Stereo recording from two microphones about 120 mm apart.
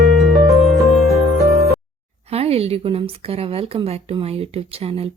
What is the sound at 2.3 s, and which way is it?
A woman's voice, 55° right (ahead or behind).